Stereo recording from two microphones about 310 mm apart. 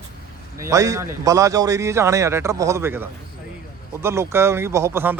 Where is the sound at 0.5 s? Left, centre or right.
Centre.